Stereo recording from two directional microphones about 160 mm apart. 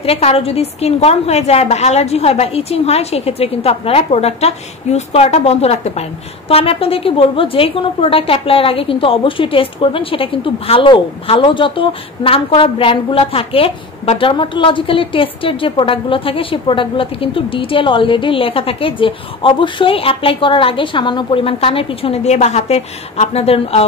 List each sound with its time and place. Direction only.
0.0 s a woman's voice: 40° left (ahead or behind)